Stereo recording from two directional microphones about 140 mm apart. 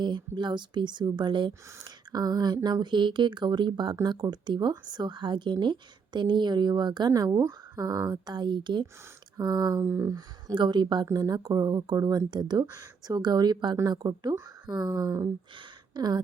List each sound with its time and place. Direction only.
0.0 s speech: 35° right (ahead or behind)